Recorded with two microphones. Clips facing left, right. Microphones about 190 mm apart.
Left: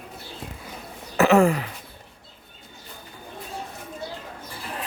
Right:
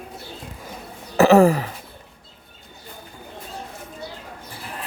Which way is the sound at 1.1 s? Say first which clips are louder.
Right 4 dB; 35° right (ahead or behind).